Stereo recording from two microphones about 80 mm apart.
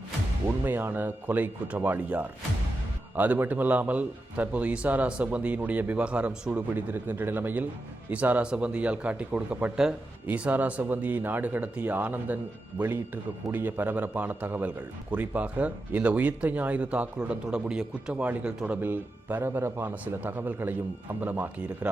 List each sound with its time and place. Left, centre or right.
0.4 s a man's voice: right
13.5 s a man's voice: right